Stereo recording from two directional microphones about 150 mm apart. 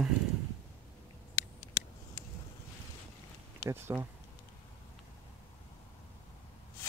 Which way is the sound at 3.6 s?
15° right (ahead or behind).